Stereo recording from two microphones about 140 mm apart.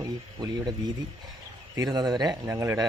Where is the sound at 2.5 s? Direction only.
20° right (ahead or behind).